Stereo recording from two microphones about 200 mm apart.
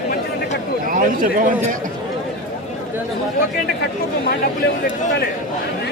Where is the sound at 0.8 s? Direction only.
40° right (ahead or behind).